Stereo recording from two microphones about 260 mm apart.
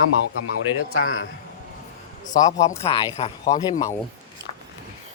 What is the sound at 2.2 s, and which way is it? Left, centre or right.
Speech, left.